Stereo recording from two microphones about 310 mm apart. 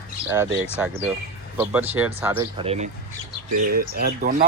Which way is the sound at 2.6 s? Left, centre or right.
Centre.